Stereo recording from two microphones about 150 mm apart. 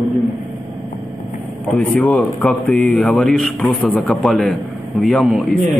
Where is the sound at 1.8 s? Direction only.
10° left (ahead or behind).